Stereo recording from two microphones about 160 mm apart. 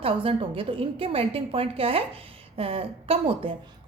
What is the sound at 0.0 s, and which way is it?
A woman's voice, 35° right (ahead or behind).